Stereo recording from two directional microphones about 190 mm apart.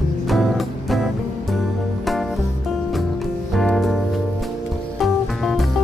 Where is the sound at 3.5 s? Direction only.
Centre (ahead or behind).